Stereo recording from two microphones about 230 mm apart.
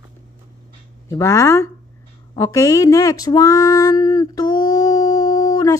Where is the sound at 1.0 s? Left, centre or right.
Centre.